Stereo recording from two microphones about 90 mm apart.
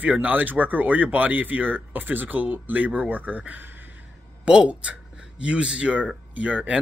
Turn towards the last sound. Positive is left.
turn(degrees=-15)  # may be behind; listen again after turning